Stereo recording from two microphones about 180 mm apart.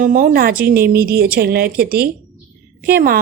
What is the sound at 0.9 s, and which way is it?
Speech, 55° right (ahead or behind).